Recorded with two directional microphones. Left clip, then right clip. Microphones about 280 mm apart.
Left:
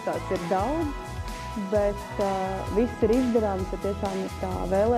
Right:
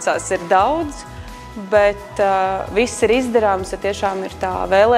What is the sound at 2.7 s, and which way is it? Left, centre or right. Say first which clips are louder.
Speech: right 6 dB; centre.